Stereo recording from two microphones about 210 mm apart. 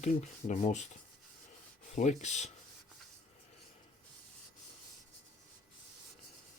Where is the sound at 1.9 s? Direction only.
35° left (ahead or behind).